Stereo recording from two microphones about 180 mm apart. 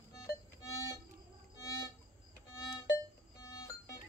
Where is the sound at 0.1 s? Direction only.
20° left (ahead or behind).